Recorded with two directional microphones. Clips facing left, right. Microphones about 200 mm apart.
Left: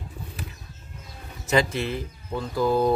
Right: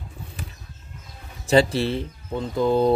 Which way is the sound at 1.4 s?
30° right (ahead or behind).